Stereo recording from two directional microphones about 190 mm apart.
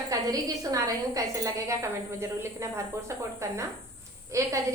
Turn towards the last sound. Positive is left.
turn(degrees=-15)  # may be behind; listen again after turning